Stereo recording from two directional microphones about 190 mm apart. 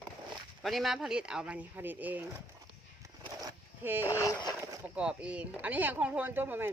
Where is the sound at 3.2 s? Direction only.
20° right (ahead or behind).